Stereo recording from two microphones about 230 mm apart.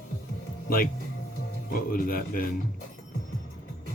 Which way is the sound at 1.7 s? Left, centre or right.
Left.